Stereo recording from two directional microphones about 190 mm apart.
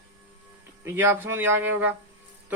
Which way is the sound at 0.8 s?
10° right (ahead or behind).